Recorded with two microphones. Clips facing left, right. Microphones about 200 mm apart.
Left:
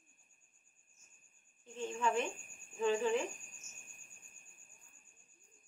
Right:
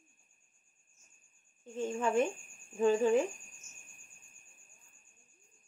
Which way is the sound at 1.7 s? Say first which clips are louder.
Right 5 dB; 45° right (ahead or behind).